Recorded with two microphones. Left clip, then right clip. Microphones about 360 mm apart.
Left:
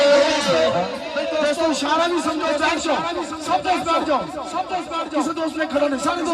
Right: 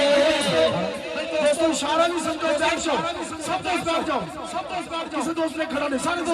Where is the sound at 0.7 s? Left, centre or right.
Left.